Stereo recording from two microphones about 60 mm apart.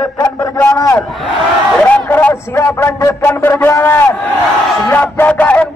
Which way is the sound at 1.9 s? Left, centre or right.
Left.